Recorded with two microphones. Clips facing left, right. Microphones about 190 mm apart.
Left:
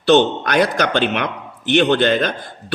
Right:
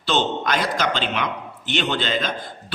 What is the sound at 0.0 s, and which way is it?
A man's voice, 60° left (ahead or behind).